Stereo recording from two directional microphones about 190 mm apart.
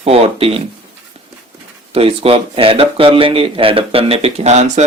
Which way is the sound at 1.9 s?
30° right (ahead or behind).